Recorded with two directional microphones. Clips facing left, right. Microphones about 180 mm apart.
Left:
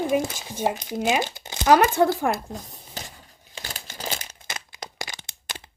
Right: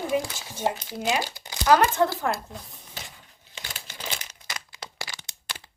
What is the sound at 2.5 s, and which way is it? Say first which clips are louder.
Crumpling: left 5 dB; 40° left (ahead or behind).